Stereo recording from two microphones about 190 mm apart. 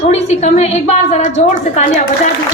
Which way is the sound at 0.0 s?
35° left (ahead or behind).